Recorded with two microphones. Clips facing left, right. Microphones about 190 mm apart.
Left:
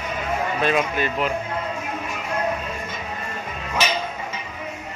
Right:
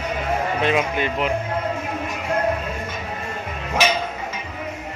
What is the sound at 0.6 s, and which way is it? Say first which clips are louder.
Sheep: left 1 dB; 20° right (ahead or behind).